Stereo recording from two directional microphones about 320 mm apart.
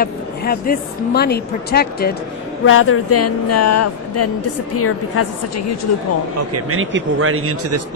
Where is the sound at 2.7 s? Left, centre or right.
Left.